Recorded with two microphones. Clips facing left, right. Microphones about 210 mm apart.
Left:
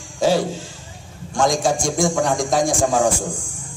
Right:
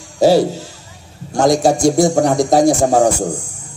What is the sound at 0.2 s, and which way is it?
A man's voice, 40° right (ahead or behind).